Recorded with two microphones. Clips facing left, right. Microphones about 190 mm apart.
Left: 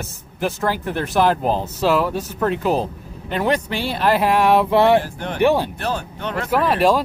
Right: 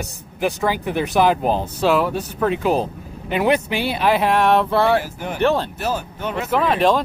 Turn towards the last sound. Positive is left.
turn(degrees=5)  # may be behind; listen again after turning